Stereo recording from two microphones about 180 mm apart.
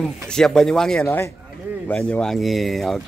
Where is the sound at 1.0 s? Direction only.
15° left (ahead or behind).